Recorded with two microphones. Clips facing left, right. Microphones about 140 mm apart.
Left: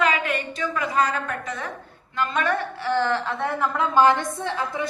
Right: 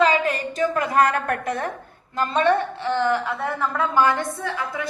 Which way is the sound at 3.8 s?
20° left (ahead or behind).